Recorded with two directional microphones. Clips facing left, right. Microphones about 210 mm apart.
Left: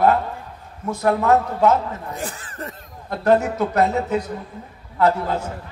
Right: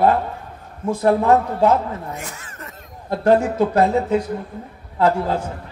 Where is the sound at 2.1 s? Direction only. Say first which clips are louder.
Left 4 dB; 35° left (ahead or behind).